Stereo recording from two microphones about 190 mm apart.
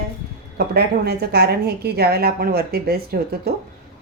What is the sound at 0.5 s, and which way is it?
A woman's voice, 55° right (ahead or behind).